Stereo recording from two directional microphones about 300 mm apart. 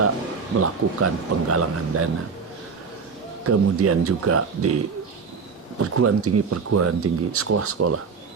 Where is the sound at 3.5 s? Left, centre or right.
Right.